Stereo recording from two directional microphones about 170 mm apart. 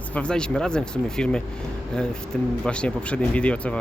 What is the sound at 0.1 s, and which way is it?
Speech, 5° left (ahead or behind).